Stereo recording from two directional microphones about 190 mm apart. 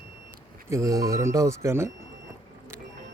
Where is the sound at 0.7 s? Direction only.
15° right (ahead or behind).